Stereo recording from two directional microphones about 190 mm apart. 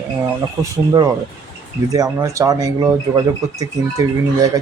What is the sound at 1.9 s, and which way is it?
Speech, 20° right (ahead or behind).